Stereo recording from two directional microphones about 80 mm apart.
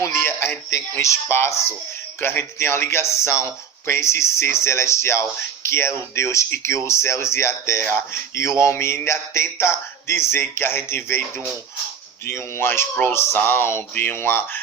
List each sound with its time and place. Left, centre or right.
0.0 s speech: left
12.2 s speech: left